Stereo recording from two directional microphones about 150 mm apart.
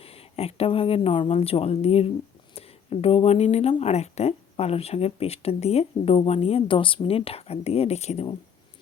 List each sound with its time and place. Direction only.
0.0 s speech: 40° left (ahead or behind)